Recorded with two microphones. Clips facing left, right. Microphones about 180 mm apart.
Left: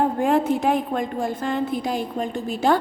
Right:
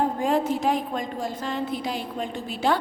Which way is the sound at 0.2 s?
55° left (ahead or behind).